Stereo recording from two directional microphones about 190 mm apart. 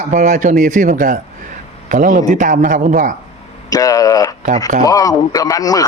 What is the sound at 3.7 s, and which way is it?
Speech, 20° left (ahead or behind).